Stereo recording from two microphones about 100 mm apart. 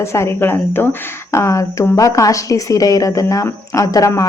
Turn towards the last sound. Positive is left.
turn(degrees=35)  # may be behind; listen again after turning